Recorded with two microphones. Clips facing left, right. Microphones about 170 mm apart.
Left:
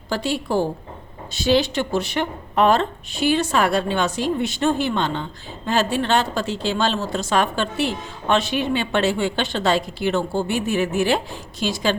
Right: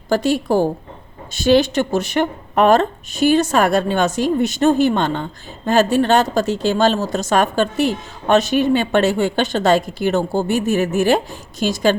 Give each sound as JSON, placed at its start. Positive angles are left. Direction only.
{"t": 0.1, "sound": "speech", "side_deg": -45}